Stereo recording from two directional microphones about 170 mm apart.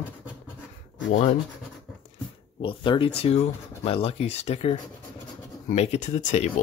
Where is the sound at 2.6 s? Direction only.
30° left (ahead or behind).